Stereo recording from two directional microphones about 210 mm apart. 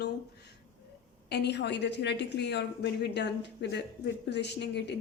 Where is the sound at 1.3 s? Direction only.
55° left (ahead or behind).